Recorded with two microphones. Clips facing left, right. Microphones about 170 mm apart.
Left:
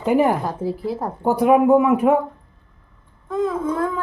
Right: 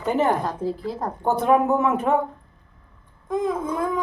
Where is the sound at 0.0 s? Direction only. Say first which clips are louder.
Left 4 dB; 10° left (ahead or behind).